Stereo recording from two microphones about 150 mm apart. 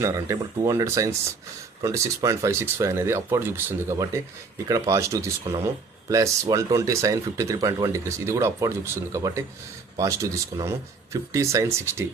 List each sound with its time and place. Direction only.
0.0 s speech: 25° right (ahead or behind)